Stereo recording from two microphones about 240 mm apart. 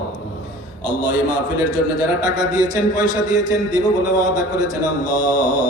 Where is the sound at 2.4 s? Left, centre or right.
Centre.